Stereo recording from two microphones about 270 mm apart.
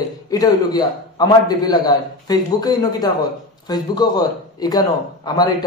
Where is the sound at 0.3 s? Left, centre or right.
Centre.